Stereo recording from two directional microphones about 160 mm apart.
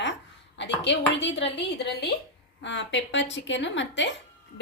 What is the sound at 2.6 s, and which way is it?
A woman's voice, 90° left.